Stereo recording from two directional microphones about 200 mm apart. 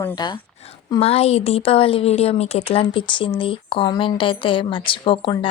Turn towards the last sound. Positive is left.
turn(degrees=25)  # may be behind; listen again after turning